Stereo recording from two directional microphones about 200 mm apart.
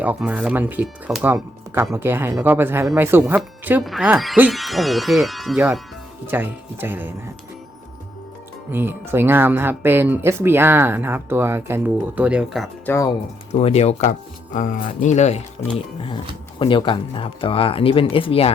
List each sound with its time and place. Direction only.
0.0 s speech: 5° right (ahead or behind)
8.7 s speech: 10° right (ahead or behind)
12.9 s speech: 15° left (ahead or behind)
13.5 s speech: 30° left (ahead or behind)